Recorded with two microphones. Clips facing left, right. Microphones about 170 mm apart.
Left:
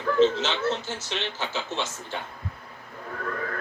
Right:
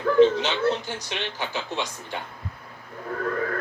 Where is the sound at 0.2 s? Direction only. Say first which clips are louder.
Right 4 dB; 15° right (ahead or behind).